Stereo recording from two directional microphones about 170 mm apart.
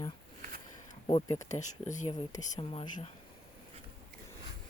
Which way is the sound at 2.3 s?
30° left (ahead or behind).